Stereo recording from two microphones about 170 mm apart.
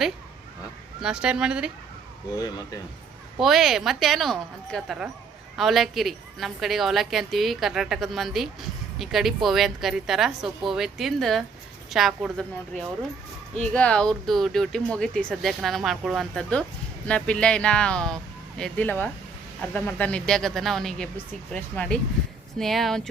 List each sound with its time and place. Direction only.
1.0 s a woman's voice: 5° right (ahead or behind)
2.3 s speech: 20° left (ahead or behind)
3.4 s a woman's voice: centre (ahead or behind)